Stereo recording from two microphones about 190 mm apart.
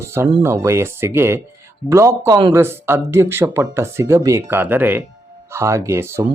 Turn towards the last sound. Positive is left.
turn(degrees=-15)  # may be behind; listen again after turning